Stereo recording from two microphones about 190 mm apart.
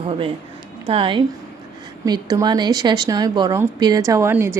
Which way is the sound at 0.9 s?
25° right (ahead or behind).